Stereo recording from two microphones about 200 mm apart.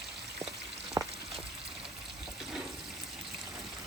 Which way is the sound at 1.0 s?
15° right (ahead or behind).